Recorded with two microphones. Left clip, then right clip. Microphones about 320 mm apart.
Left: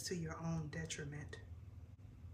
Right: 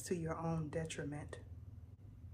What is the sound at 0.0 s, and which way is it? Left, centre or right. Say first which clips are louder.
Speech: right 5 dB; centre.